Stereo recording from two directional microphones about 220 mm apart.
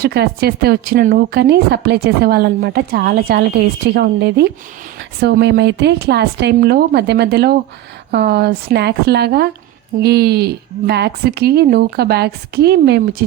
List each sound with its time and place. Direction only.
0.0 s speech: 45° right (ahead or behind)